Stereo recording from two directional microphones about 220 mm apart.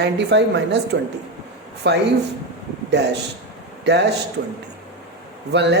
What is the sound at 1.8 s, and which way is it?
A woman's voice, 50° right (ahead or behind).